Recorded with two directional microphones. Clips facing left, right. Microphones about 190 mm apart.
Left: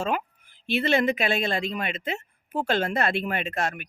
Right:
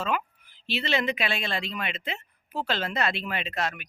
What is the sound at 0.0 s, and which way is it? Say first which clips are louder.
Speech: left 2 dB; 45° left (ahead or behind).